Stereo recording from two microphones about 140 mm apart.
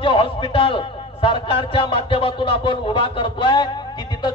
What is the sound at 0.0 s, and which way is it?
Music, 40° left (ahead or behind).